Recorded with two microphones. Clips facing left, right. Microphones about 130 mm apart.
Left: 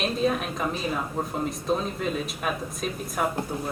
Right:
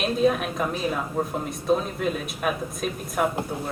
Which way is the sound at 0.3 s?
5° right (ahead or behind).